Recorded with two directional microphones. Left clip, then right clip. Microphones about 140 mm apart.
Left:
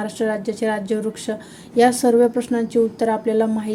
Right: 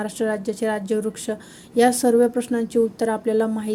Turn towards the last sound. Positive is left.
turn(degrees=-25)  # may be behind; listen again after turning